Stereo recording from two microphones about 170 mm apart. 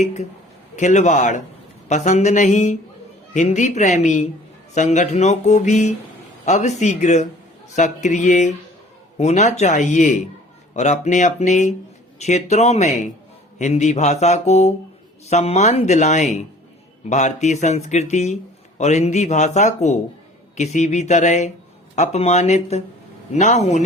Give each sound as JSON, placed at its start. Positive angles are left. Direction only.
{"t": 0.0, "sound": "speech", "side_deg": 40}